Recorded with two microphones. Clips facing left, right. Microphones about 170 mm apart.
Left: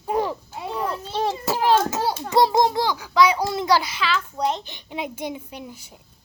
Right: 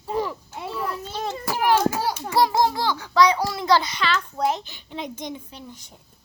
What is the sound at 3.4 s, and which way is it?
A child's voice, 20° left (ahead or behind).